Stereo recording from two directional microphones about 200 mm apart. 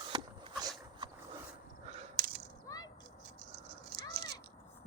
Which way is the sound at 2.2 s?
45° right (ahead or behind).